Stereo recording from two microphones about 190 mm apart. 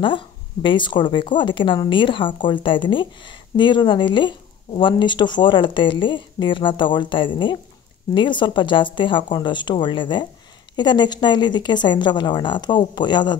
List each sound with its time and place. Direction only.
0.0 s speech: 25° left (ahead or behind)